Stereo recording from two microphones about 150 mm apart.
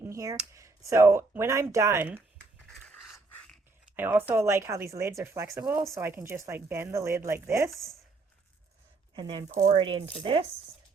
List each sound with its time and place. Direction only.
0.0 s a sound: 20° right (ahead or behind)
0.5 s speech: 20° right (ahead or behind)
2.8 s a sound: 5° left (ahead or behind)
3.9 s speech: 15° right (ahead or behind)
7.7 s speech: centre (ahead or behind)
9.1 s speech: 30° right (ahead or behind)